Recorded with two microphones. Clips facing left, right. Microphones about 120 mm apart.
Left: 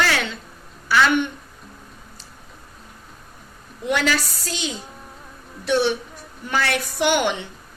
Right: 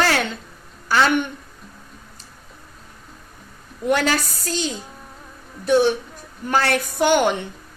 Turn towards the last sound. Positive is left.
turn(degrees=-40)  # may be behind; listen again after turning